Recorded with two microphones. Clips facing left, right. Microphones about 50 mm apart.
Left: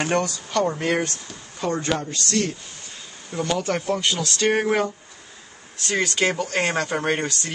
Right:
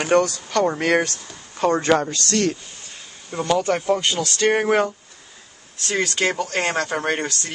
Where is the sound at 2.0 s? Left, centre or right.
Right.